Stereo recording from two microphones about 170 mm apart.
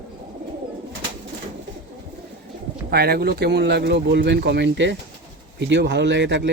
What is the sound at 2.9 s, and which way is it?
Speech, 65° right (ahead or behind).